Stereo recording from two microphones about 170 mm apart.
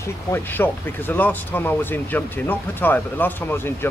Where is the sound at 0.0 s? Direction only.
15° left (ahead or behind).